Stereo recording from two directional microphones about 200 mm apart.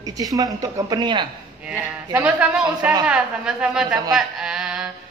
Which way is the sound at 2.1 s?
5° right (ahead or behind).